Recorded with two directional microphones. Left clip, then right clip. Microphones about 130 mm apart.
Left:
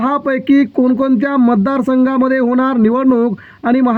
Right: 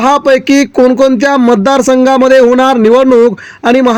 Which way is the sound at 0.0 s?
30° right (ahead or behind).